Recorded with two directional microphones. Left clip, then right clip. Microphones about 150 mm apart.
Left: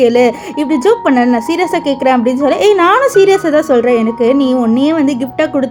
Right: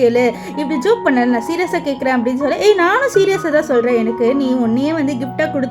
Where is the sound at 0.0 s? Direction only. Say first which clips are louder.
Left 4 dB; 35° left (ahead or behind).